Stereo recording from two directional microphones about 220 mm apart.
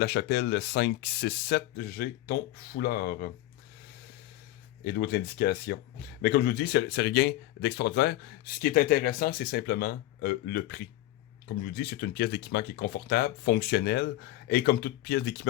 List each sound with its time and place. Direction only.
0.0 s speech: 45° left (ahead or behind)
4.8 s speech: 45° left (ahead or behind)